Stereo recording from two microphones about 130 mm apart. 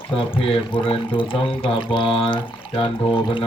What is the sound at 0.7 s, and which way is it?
Speech, 40° left (ahead or behind).